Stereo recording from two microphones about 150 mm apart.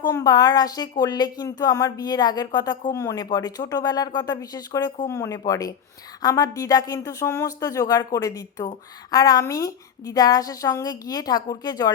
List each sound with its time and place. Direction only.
0.1 s a woman's voice: 25° left (ahead or behind)